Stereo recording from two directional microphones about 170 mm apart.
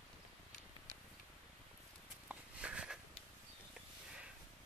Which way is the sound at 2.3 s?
5° right (ahead or behind).